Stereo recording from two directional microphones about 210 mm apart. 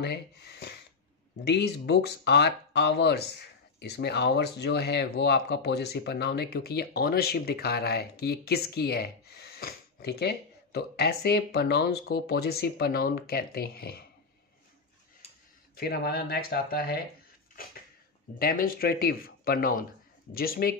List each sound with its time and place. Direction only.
0.0 s speech: 50° left (ahead or behind)
15.7 s speech: 50° left (ahead or behind)
18.4 s speech: 45° left (ahead or behind)